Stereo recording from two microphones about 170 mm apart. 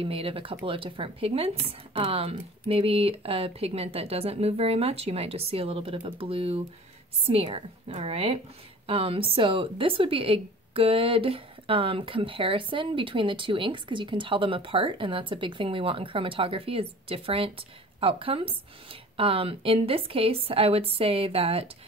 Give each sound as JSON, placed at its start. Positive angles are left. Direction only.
{"t": 0.0, "sound": "speech", "side_deg": -35}